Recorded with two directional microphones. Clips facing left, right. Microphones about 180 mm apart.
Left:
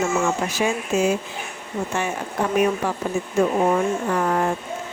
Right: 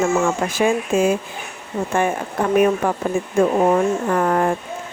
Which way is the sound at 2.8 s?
50° right (ahead or behind).